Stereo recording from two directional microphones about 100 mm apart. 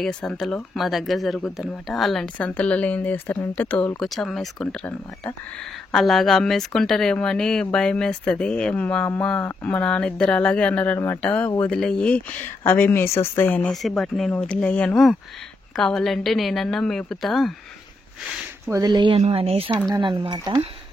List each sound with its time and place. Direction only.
0.0 s speech: 5° left (ahead or behind)
2.2 s speech: 15° left (ahead or behind)
5.9 s speech: 5° left (ahead or behind); by 13.7 s 20° left (ahead or behind)
13.7 s speech: centre (ahead or behind)
18.7 s speech: 35° right (ahead or behind)
19.1 s speech: 80° right
20.0 s speech: 55° right (ahead or behind)
20.3 s speech: 40° right (ahead or behind)